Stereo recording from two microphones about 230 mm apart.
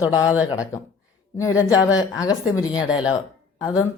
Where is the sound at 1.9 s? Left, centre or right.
Centre.